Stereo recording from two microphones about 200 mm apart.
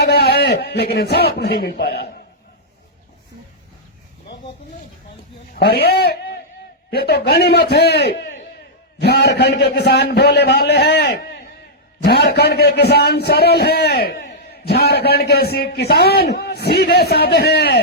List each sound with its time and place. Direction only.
0.0 s a man's voice: 55° left (ahead or behind)
5.5 s a man's voice: 50° left (ahead or behind)